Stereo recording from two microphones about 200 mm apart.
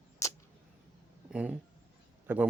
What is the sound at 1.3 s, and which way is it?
Speech, 5° right (ahead or behind).